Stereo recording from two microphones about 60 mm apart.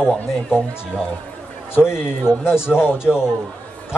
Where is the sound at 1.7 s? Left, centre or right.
Left.